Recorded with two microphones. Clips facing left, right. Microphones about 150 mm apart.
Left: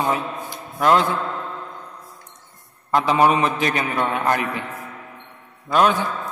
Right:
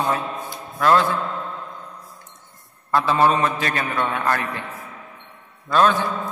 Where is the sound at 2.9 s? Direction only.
15° left (ahead or behind).